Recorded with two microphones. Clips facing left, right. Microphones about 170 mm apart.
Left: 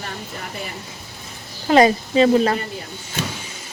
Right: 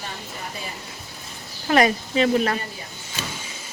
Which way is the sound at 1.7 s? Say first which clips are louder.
Left 5 dB; 30° left (ahead or behind).